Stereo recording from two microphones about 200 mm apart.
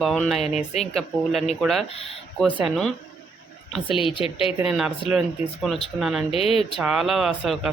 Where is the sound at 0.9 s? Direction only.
Centre (ahead or behind).